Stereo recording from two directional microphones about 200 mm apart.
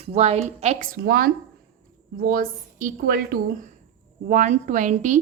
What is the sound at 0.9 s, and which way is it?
A woman's voice, 45° right (ahead or behind).